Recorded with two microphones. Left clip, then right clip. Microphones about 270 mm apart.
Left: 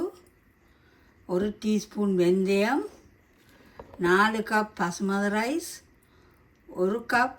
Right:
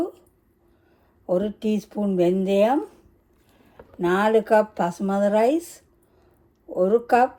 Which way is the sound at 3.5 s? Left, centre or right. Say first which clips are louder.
Left 2 dB; centre.